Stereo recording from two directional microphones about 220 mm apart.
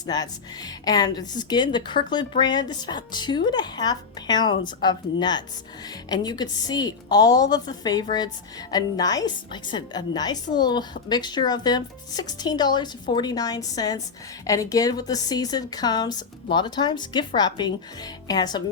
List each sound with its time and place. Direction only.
0.0 s a woman's voice: 20° left (ahead or behind)